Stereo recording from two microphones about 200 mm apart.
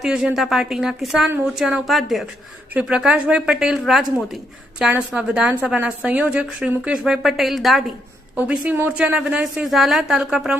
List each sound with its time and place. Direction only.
0.0 s a woman's voice: 5° right (ahead or behind)